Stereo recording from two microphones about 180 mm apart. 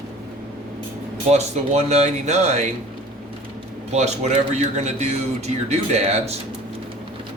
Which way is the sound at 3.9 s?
40° right (ahead or behind).